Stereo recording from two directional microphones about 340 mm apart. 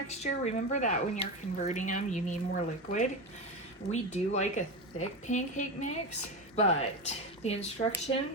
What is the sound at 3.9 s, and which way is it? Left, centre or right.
Speech, centre.